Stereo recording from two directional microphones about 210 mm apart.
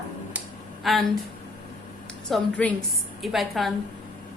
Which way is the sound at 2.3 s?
5° left (ahead or behind).